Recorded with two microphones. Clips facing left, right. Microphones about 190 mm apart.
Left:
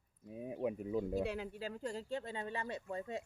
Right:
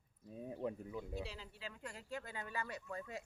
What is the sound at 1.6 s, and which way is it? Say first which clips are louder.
Speech: left 9 dB; 35° left (ahead or behind).